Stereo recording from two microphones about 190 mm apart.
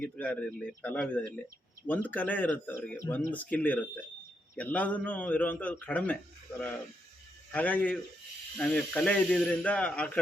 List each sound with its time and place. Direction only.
0.0 s a man's voice: 5° left (ahead or behind)
7.5 s a man's voice: 10° left (ahead or behind)